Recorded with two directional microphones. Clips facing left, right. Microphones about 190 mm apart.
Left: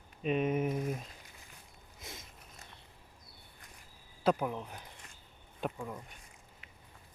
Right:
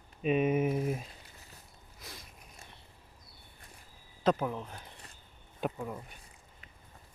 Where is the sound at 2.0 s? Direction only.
20° left (ahead or behind).